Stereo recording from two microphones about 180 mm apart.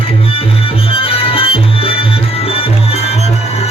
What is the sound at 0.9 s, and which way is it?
Music, 30° left (ahead or behind).